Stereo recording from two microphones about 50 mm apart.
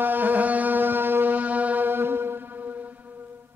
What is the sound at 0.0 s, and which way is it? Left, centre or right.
Music, right.